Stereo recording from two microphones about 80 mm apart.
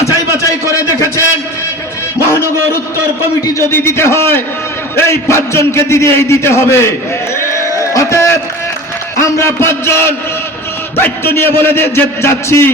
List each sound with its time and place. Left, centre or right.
2.1 s a man's voice: left
7.3 s a sound: left
9.1 s a man's voice: left